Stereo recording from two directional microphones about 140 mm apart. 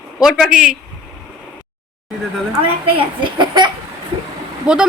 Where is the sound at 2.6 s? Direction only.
35° right (ahead or behind).